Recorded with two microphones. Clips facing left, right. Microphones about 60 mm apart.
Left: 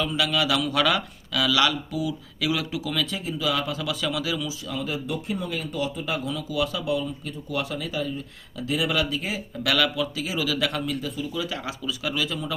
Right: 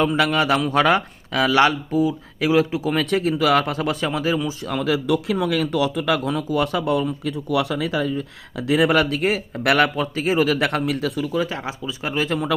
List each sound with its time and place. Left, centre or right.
0.0 s speech: right
3.1 s speech: right
4.6 s speech: right
4.9 s speech: right
7.3 s speech: right
11.3 s speech: right